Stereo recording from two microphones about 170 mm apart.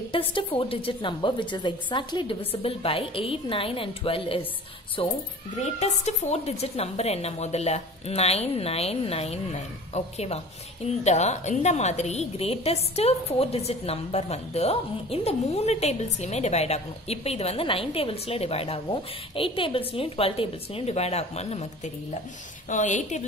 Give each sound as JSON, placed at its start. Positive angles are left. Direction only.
{"t": 0.1, "sound": "a woman's voice", "side_deg": 30}